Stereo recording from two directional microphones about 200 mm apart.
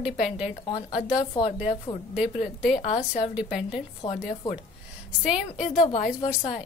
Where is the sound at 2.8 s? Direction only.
30° left (ahead or behind).